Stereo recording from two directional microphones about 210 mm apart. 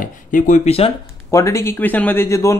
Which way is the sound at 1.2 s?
15° left (ahead or behind).